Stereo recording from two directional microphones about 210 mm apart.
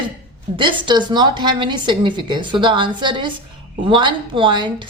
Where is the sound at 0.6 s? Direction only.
25° right (ahead or behind).